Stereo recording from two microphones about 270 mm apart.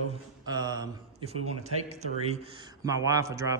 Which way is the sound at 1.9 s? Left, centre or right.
Right.